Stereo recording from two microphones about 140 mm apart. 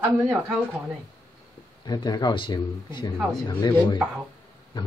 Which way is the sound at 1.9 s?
30° left (ahead or behind).